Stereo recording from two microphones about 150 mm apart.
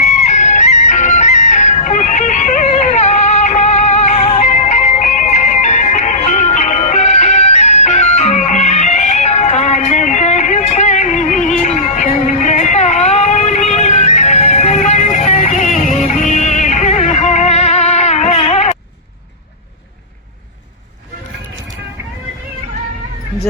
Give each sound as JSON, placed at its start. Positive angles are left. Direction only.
{"t": 0.0, "sound": "music", "side_deg": 50}